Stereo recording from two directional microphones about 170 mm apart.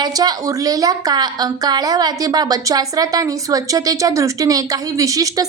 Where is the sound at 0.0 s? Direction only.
25° right (ahead or behind).